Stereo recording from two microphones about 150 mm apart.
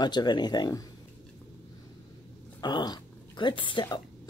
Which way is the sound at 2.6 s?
25° left (ahead or behind).